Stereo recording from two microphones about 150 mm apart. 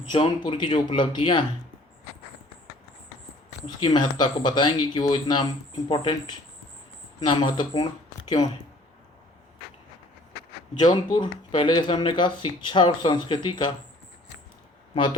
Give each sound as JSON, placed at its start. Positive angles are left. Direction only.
{"t": 0.1, "sound": "speech", "side_deg": 35}
{"t": 3.8, "sound": "speech", "side_deg": 30}
{"t": 10.8, "sound": "speech", "side_deg": 30}